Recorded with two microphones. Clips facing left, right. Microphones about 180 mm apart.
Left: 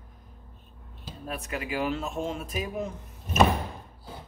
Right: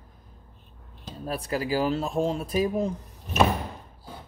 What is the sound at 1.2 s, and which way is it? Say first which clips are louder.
Speech: right 6 dB; 35° right (ahead or behind).